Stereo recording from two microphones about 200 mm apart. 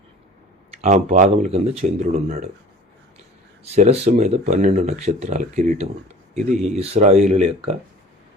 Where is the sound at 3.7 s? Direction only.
30° right (ahead or behind).